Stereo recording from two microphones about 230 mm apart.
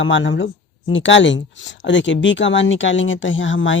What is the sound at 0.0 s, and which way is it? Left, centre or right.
Speech, left.